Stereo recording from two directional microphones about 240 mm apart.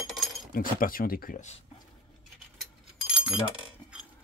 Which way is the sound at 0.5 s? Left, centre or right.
Left.